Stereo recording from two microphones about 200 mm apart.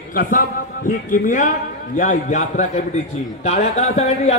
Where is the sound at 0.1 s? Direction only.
45° left (ahead or behind).